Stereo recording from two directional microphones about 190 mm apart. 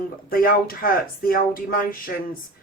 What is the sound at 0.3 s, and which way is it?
Speech, 50° left (ahead or behind).